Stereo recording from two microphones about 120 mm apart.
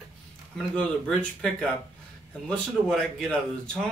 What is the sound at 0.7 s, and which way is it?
A man's voice, 10° left (ahead or behind).